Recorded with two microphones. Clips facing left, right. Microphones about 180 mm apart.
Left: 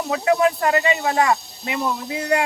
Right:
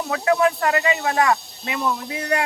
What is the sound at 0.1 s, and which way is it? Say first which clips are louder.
Speech: left 1 dB; 20° left (ahead or behind).